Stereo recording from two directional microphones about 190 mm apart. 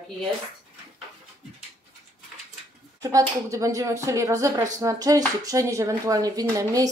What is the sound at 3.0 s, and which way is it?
Speech, 15° right (ahead or behind).